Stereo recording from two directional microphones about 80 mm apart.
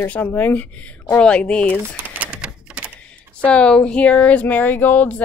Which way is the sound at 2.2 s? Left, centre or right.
Centre.